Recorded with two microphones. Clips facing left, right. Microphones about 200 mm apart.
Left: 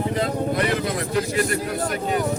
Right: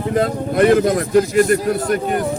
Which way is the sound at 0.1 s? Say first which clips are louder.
Right 5 dB; 50° right (ahead or behind).